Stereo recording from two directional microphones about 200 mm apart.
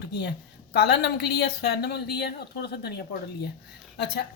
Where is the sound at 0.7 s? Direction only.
55° left (ahead or behind).